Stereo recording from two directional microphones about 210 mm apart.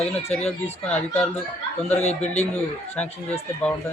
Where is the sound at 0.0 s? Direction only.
30° left (ahead or behind).